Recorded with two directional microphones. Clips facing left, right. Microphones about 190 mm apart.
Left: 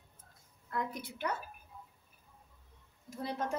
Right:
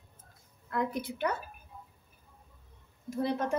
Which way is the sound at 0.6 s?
80° right.